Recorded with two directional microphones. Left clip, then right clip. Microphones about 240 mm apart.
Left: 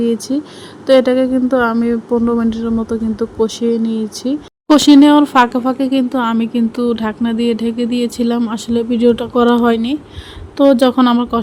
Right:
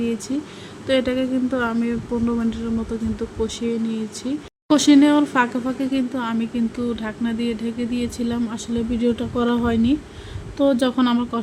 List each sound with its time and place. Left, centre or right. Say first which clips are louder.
0.9 s speech: left 10 dB; centre